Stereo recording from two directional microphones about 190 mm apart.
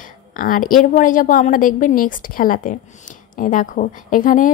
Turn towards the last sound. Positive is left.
turn(degrees=45)  # may be behind; listen again after turning